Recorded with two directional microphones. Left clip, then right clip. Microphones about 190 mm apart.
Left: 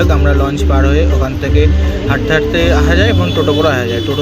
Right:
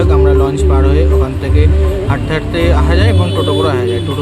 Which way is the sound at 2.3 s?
Centre (ahead or behind).